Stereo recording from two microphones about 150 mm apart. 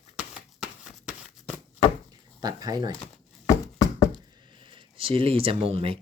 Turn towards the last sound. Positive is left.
turn(degrees=-40)  # may be behind; listen again after turning